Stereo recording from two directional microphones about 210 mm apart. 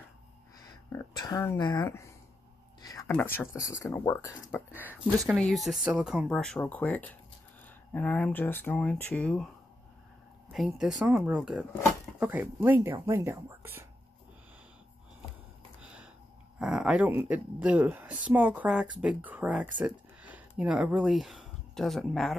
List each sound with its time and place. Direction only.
0.9 s speech: 20° left (ahead or behind)
2.8 s a sound: 15° left (ahead or behind)
3.1 s speech: 10° left (ahead or behind)
4.8 s speech: 5° right (ahead or behind)
10.5 s speech: centre (ahead or behind)
15.8 s a sound: 5° right (ahead or behind)
16.5 s speech: 5° right (ahead or behind)